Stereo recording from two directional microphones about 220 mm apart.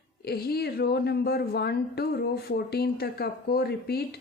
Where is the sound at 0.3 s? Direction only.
45° left (ahead or behind).